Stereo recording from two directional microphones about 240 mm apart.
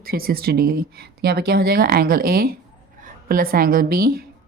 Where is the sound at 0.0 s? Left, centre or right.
Right.